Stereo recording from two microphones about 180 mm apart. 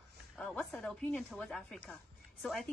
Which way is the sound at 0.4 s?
5° left (ahead or behind).